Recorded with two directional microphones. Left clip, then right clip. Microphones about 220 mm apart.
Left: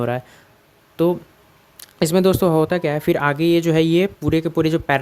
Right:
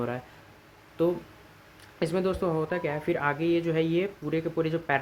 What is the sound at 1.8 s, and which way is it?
Speech, 55° left (ahead or behind).